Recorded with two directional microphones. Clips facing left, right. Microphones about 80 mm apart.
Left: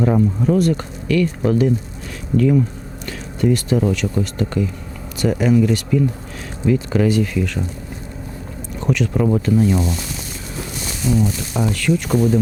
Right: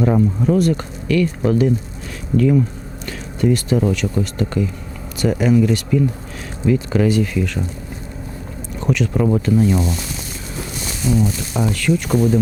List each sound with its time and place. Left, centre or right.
0.0 s speech: centre
2.3 s speech: centre
3.1 s a sound: centre
3.8 s speech: centre
8.9 s speech: centre